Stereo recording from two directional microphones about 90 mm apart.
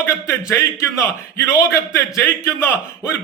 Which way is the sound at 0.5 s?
30° left (ahead or behind).